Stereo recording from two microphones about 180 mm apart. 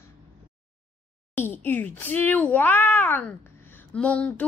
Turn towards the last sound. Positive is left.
turn(degrees=5)  # may be behind; listen again after turning